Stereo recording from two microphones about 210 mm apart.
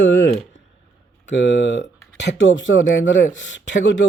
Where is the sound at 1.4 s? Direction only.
55° left (ahead or behind).